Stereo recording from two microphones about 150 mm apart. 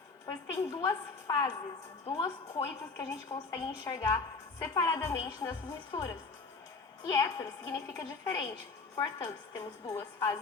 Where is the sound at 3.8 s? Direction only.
25° left (ahead or behind).